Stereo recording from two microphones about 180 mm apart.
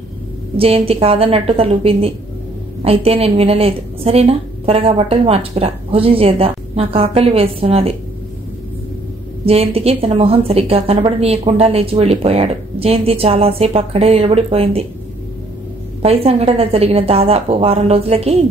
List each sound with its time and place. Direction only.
0.6 s a woman's voice: 30° right (ahead or behind)
9.5 s a woman's voice: 35° right (ahead or behind)
16.0 s a woman's voice: 35° right (ahead or behind)